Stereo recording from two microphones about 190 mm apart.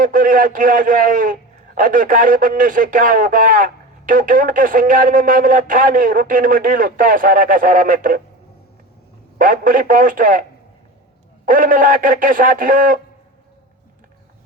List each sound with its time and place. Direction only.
0.0 s a man's voice: 45° right (ahead or behind)
9.4 s a man's voice: 45° right (ahead or behind)
11.4 s a man's voice: 45° right (ahead or behind)